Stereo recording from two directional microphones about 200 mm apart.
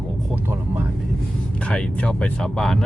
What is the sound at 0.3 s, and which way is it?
Vehicle, 10° right (ahead or behind).